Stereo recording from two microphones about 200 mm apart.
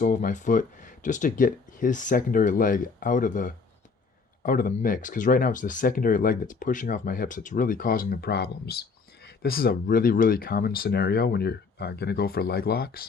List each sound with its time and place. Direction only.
0.0 s speech: 40° left (ahead or behind)